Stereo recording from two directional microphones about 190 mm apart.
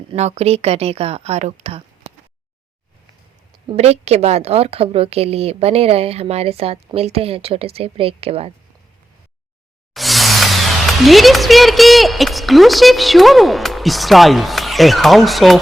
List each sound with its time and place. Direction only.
0.1 s a woman's voice: 35° right (ahead or behind)
3.7 s a woman's voice: 35° right (ahead or behind)
9.9 s speech: centre (ahead or behind)